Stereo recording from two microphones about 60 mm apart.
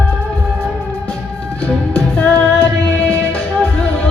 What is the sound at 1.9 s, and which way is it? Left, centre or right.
Music, left.